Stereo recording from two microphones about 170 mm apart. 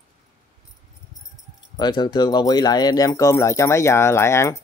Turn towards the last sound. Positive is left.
turn(degrees=15)  # may be behind; listen again after turning